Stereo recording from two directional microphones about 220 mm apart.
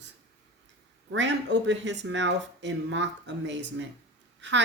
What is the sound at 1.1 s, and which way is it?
Speech, 55° right (ahead or behind).